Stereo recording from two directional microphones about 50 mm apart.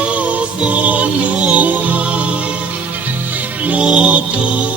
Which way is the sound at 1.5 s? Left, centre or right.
Right.